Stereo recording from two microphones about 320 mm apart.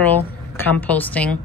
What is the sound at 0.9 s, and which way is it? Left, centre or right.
Speech, centre.